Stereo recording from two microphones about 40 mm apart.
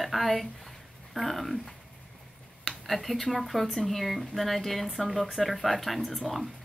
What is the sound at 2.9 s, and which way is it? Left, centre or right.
Speech, centre.